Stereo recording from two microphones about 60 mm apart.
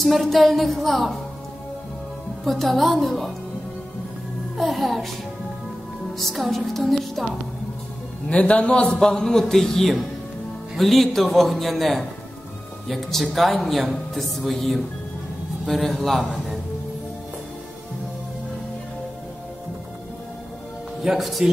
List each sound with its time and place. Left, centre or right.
0.0 s speech: centre
2.4 s speech: centre
4.6 s speech: centre
6.1 s speech: centre
8.3 s a man's voice: left
9.0 s a man's voice: centre
21.0 s speech: centre